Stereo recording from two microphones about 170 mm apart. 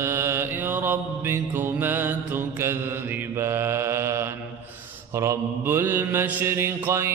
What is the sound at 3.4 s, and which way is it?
Mantra, 15° right (ahead or behind).